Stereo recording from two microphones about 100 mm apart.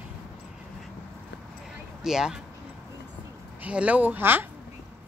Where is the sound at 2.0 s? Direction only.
5° right (ahead or behind).